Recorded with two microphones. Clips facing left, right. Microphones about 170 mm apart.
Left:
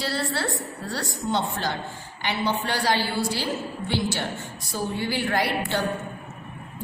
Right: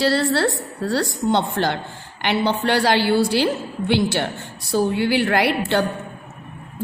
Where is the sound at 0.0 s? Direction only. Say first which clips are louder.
Right 9 dB; 75° right (ahead or behind).